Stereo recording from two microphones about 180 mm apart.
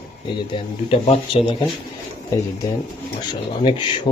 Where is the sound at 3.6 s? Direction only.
25° left (ahead or behind).